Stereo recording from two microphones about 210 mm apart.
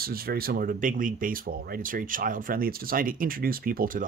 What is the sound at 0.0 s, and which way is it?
Speech, 45° right (ahead or behind).